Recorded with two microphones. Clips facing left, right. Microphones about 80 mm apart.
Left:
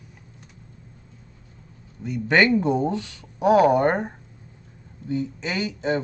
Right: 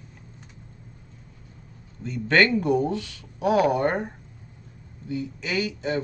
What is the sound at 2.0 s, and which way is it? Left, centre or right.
Speech, centre.